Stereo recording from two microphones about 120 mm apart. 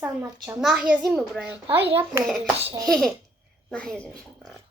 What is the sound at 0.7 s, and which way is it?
A child's voice, 10° right (ahead or behind).